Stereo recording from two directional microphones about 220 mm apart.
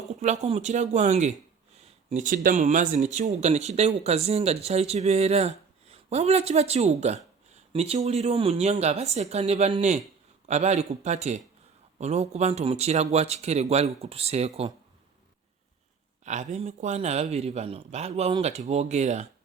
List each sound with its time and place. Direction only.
0.3 s speech: 25° right (ahead or behind)
16.2 s speech: 35° right (ahead or behind)